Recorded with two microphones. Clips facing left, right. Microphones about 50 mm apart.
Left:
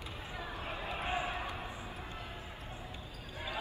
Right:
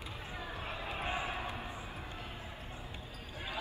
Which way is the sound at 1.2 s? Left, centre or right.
Left.